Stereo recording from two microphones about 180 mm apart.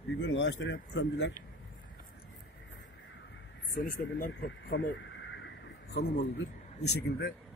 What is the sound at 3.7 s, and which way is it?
Speech, 50° left (ahead or behind).